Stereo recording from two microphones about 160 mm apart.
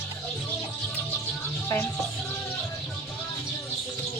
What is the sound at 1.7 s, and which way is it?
Speech, 20° left (ahead or behind).